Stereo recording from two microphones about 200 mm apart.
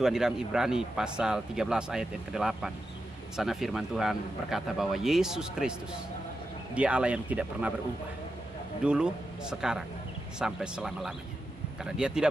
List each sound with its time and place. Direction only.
0.0 s speech: centre (ahead or behind)
8.8 s speech: 5° right (ahead or behind)